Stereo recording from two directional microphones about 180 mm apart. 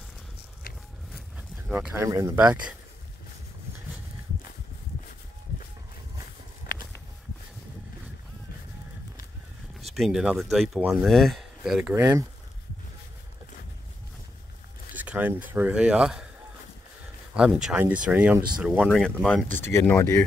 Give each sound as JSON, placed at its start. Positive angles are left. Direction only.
{"t": 1.7, "sound": "speech", "side_deg": -5}
{"t": 2.0, "sound": "speech", "side_deg": -20}
{"t": 2.3, "sound": "speech", "side_deg": -5}
{"t": 9.9, "sound": "speech", "side_deg": 0}
{"t": 11.9, "sound": "speech", "side_deg": -15}
{"t": 15.0, "sound": "speech", "side_deg": -10}
{"t": 17.3, "sound": "speech", "side_deg": -5}
{"t": 18.9, "sound": "speech", "side_deg": 5}